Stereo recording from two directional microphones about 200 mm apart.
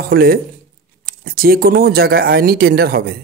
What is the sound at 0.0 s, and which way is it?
Speech, 50° right (ahead or behind).